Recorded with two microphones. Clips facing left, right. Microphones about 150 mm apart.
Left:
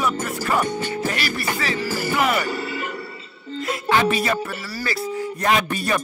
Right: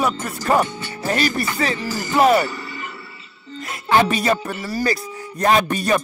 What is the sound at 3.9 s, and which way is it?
Speech, 35° right (ahead or behind).